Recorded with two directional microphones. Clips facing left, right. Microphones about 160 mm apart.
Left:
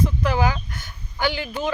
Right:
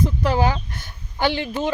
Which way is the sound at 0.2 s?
35° right (ahead or behind).